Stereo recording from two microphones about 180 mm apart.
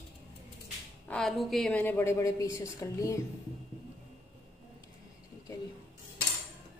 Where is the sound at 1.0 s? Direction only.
5° left (ahead or behind).